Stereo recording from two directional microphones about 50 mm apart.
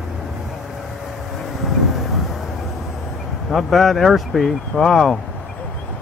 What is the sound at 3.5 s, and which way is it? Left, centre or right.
Speech, centre.